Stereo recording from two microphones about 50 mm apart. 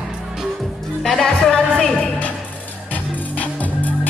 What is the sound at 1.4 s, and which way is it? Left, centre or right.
Music, centre.